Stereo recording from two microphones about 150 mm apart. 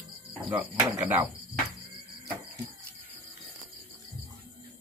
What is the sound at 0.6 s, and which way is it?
Cricket, 15° right (ahead or behind).